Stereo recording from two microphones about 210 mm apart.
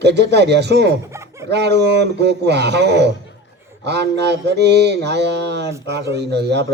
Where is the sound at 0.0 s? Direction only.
55° right (ahead or behind).